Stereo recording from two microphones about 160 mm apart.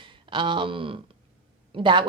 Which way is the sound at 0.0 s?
30° right (ahead or behind).